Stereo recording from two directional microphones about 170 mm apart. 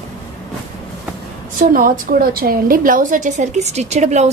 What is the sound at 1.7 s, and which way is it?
A woman's voice, 60° right (ahead or behind).